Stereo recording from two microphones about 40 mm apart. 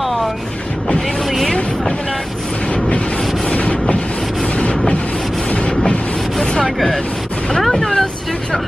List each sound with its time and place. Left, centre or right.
3.4 s wind noise: left
4.6 s vehicle: left
6.6 s a sound: centre
7.6 s vehicle: centre